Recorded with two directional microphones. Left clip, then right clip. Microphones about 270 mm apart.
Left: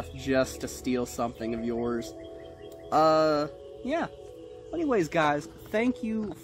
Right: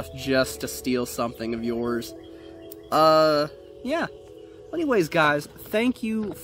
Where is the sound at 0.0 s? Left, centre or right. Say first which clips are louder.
Right 4 dB; right.